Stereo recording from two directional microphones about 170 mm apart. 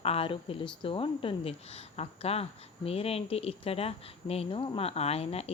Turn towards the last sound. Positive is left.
turn(degrees=35)  # may be behind; listen again after turning